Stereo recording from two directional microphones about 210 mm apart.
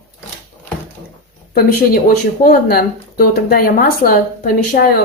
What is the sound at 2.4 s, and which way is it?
Speech, 45° left (ahead or behind).